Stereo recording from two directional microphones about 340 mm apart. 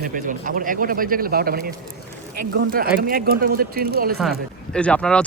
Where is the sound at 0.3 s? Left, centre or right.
Right.